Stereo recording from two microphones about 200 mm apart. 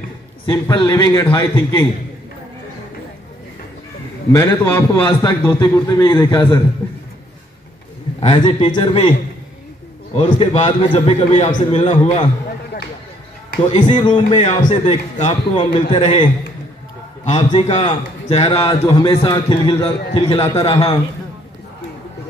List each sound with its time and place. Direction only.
0.5 s a man's voice: 20° left (ahead or behind)
4.3 s a man's voice: 10° left (ahead or behind)
4.9 s a man's voice: 25° left (ahead or behind)
6.8 s a man's voice: 10° left (ahead or behind)
8.2 s a man's voice: 30° left (ahead or behind)
10.1 s a man's voice: 30° left (ahead or behind)
13.8 s a man's voice: 25° left (ahead or behind)
17.4 s a man's voice: 25° left (ahead or behind)